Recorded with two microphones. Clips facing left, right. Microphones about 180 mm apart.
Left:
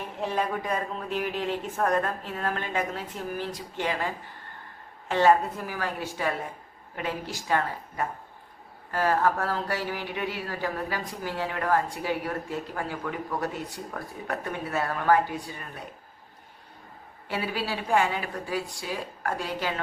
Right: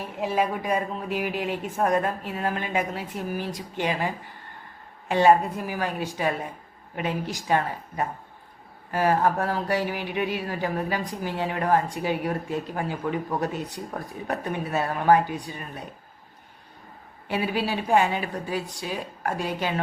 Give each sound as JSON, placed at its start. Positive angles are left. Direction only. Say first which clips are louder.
{"t": 0.2, "sound": "a woman's voice", "louder": "right 3 dB", "side_deg": -10}
{"t": 17.2, "sound": "a woman's voice", "louder": "right 4 dB", "side_deg": -20}